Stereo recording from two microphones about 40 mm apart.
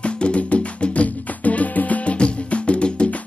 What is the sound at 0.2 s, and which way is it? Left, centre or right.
Music, left.